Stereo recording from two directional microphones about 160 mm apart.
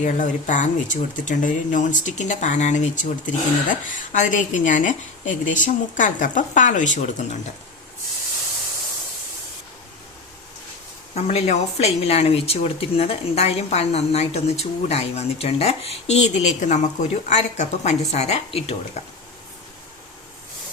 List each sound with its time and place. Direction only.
0.0 s a woman's voice: 50° left (ahead or behind)
11.1 s speech: 40° left (ahead or behind)